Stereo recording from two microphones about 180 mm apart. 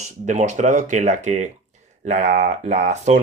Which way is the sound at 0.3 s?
40° right (ahead or behind).